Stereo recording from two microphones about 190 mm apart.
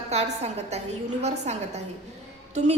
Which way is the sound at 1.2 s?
35° right (ahead or behind).